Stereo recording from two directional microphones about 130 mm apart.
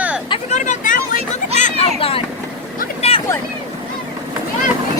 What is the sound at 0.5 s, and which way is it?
Vehicle, 70° left (ahead or behind).